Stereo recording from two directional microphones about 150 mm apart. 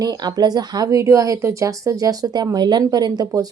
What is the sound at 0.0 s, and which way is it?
Speech, 25° right (ahead or behind).